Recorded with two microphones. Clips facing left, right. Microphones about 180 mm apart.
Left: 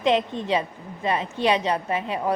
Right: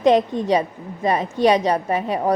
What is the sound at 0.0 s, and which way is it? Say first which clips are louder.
A woman's voice: right 6 dB; 40° right (ahead or behind).